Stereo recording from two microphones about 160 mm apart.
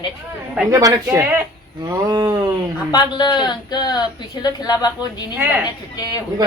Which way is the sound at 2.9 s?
25° left (ahead or behind).